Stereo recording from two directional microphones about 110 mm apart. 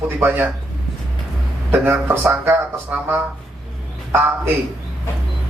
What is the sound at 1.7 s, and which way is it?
Speech, 20° right (ahead or behind).